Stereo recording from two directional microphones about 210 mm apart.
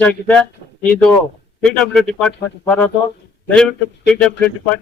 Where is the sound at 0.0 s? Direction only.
5° left (ahead or behind).